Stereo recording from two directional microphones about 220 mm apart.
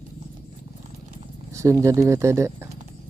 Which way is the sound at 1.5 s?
15° right (ahead or behind).